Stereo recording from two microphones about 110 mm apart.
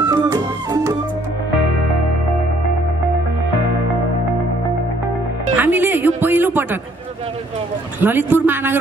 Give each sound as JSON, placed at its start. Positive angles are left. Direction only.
{"t": 0.0, "sound": "music", "side_deg": -30}
{"t": 5.6, "sound": "a sound", "side_deg": -20}
{"t": 8.0, "sound": "a man's voice", "side_deg": -20}